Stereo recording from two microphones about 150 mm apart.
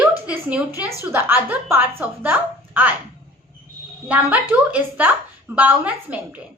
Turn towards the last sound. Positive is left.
turn(degrees=-10)  # may be behind; listen again after turning